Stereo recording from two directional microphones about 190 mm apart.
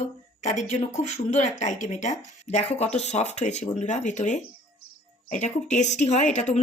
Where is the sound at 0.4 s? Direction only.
40° left (ahead or behind).